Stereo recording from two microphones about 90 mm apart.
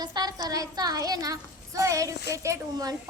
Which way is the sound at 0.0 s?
50° right (ahead or behind).